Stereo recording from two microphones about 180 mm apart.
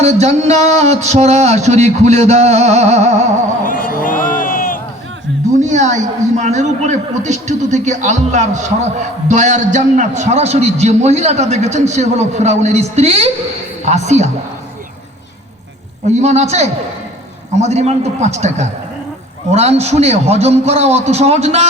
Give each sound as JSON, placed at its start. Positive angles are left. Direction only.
{"t": 0.0, "sound": "a man's voice", "side_deg": -35}
{"t": 3.7, "sound": "run", "side_deg": 50}
{"t": 5.5, "sound": "a man's voice", "side_deg": -40}
{"t": 16.2, "sound": "a man's voice", "side_deg": -40}